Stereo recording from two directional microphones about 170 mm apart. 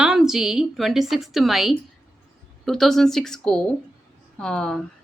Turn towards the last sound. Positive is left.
turn(degrees=5)  # may be behind; listen again after turning